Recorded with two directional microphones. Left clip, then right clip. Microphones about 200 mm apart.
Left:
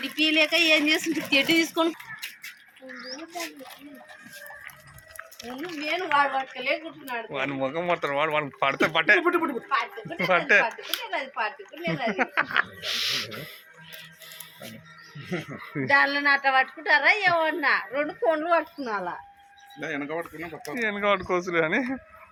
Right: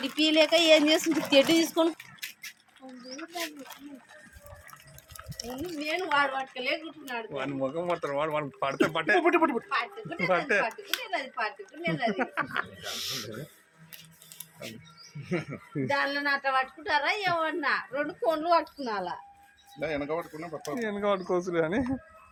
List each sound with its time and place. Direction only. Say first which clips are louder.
0.0 s speech: left 1 dB; 60° right (ahead or behind)
5.9 s a woman's voice: left 4 dB; 30° left (ahead or behind)
7.3 s speech: left 4 dB; 10° left (ahead or behind)
9.6 s a woman's voice: left 4 dB; 30° left (ahead or behind)
10.2 s speech: left 5 dB; 5° left (ahead or behind)
10.9 s a woman's voice: left 2 dB; 30° left (ahead or behind)
12.1 s speech: left 6 dB; 5° left (ahead or behind)
15.3 s speech: even; 5° right (ahead or behind)
15.9 s a woman's voice: left 7 dB; 30° left (ahead or behind)
18.9 s a woman's voice: left 3 dB; 40° left (ahead or behind)
19.8 s speech: even; 30° right (ahead or behind)
20.8 s speech: left 5 dB; centre (ahead or behind)